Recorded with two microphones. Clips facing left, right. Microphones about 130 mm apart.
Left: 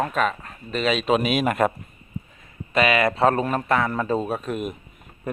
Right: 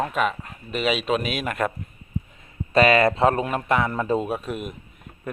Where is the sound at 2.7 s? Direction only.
35° right (ahead or behind); by 5.1 s centre (ahead or behind).